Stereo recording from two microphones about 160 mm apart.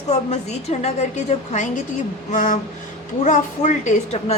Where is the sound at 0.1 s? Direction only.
45° left (ahead or behind).